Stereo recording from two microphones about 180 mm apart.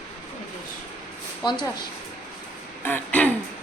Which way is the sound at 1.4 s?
25° left (ahead or behind).